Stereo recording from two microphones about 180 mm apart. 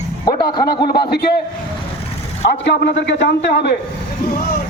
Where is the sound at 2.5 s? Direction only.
75° left (ahead or behind).